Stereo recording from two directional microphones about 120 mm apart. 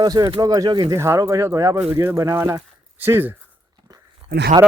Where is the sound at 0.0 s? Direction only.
30° right (ahead or behind).